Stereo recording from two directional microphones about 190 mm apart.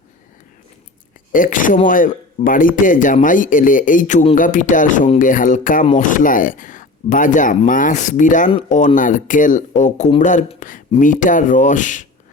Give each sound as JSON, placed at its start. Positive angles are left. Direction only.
{"t": 1.3, "sound": "speech", "side_deg": 45}